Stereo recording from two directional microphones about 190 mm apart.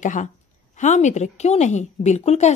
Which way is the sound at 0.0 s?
40° left (ahead or behind).